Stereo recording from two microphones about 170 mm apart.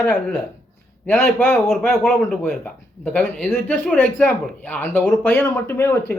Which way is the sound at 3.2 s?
5° left (ahead or behind).